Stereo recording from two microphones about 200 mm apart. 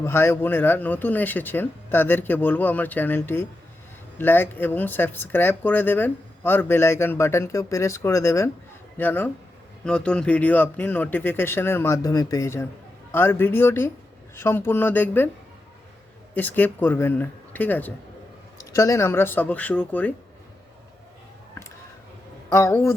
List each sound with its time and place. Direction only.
0.0 s speech: 10° left (ahead or behind)
16.3 s speech: 10° left (ahead or behind)
22.4 s speech: 15° left (ahead or behind)